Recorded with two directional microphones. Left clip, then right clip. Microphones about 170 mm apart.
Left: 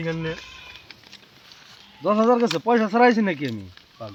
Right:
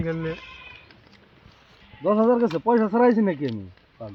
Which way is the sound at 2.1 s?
30° left (ahead or behind).